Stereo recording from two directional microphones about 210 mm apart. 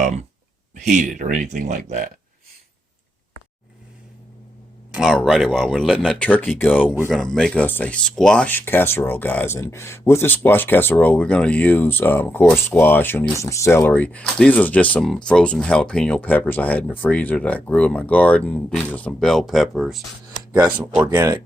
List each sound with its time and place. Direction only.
0.0 s speech: 35° right (ahead or behind)
4.9 s speech: centre (ahead or behind)